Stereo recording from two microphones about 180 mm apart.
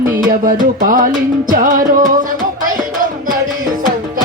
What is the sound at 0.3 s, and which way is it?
Music, 50° right (ahead or behind).